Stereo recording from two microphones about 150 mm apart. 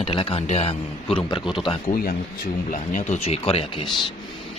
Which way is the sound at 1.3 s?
30° left (ahead or behind).